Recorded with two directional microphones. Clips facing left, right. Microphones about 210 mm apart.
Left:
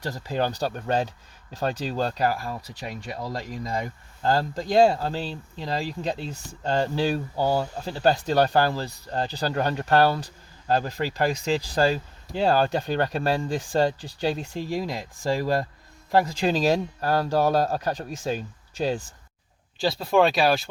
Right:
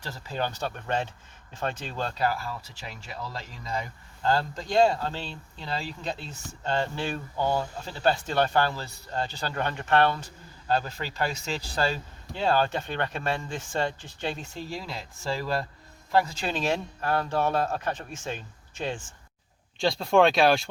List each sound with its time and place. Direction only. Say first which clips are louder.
0.0 s speech: left 5 dB; 40° left (ahead or behind)
14.5 s speech: left 7 dB; 15° left (ahead or behind)
14.8 s speech: left 6 dB; 40° left (ahead or behind)
19.8 s speech: even; centre (ahead or behind)